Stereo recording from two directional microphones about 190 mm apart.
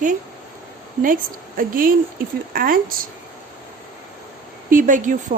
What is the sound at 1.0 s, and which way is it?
Speech, 45° right (ahead or behind).